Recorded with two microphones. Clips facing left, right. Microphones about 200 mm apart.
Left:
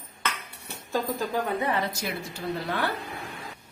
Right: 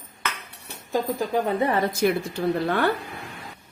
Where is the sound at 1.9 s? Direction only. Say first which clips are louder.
Right 11 dB; 55° right (ahead or behind).